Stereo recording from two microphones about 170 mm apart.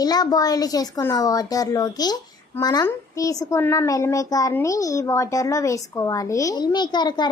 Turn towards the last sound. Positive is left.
turn(degrees=25)  # may be behind; listen again after turning